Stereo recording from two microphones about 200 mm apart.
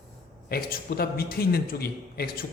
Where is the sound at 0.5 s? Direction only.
50° left (ahead or behind).